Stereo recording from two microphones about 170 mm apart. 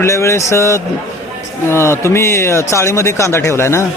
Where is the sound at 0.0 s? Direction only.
15° left (ahead or behind).